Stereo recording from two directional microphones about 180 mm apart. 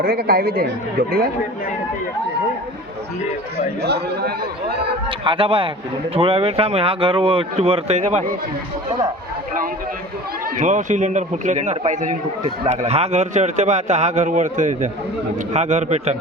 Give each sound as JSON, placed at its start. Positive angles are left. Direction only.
{"t": 0.0, "sound": "a man's voice", "side_deg": -55}
{"t": 3.8, "sound": "a man's voice", "side_deg": -65}
{"t": 5.0, "sound": "a man's voice", "side_deg": -30}
{"t": 10.6, "sound": "a man's voice", "side_deg": -45}